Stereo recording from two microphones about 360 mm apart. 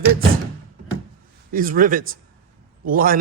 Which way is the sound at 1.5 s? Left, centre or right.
Right.